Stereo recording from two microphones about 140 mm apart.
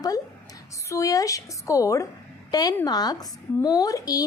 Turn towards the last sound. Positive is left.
turn(degrees=25)  # may be behind; listen again after turning